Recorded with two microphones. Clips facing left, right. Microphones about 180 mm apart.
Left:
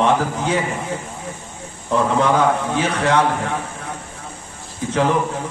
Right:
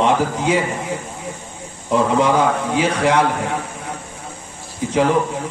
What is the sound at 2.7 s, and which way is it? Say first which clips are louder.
Speech: right 2 dB; 15° right (ahead or behind).